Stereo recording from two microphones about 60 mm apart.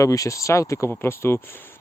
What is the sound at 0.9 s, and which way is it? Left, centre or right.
Speech, left.